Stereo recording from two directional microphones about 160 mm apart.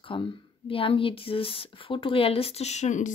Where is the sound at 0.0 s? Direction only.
35° left (ahead or behind).